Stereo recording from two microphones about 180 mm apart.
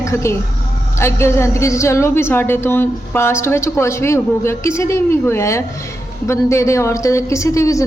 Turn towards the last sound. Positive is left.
turn(degrees=15)  # may be behind; listen again after turning